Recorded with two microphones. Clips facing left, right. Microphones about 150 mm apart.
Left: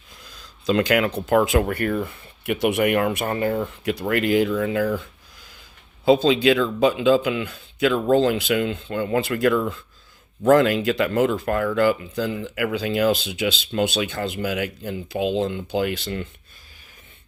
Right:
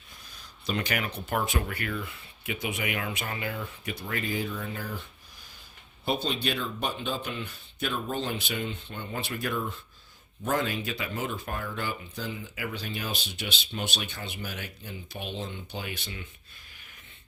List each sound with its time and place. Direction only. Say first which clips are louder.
0.3 s speech: left 11 dB; 90° left
1.6 s speech: left 11 dB; 50° left (ahead or behind)
2.4 s speech: left 13 dB; 65° left (ahead or behind); by 3.7 s 45° left (ahead or behind)
3.8 s speech: left 12 dB; 85° left
6.1 s speech: left 13 dB; 90° left; by 16.2 s 70° left (ahead or behind)